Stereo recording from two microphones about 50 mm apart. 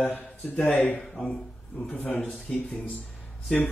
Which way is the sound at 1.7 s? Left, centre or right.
Left.